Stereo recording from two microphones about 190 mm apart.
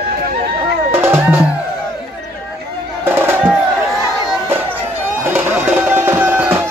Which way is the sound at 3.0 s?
10° right (ahead or behind).